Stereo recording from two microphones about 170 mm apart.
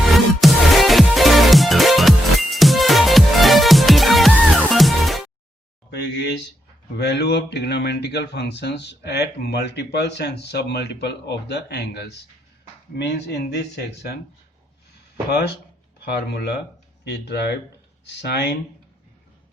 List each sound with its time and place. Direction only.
0.1 s music: centre (ahead or behind)
5.9 s a sound: 80° left
6.9 s speech: 80° left
16.0 s speech: 70° left (ahead or behind)